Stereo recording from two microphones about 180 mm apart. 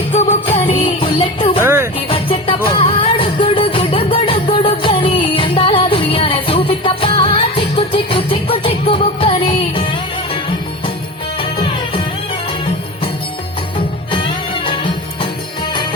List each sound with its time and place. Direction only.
0.1 s music: 35° left (ahead or behind)
1.6 s music: 15° right (ahead or behind)
2.0 s music: 30° left (ahead or behind)
11.3 s music: 30° left (ahead or behind)
13.7 s music: 30° left (ahead or behind)